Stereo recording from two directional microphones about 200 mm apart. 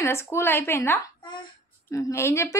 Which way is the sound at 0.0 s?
10° left (ahead or behind).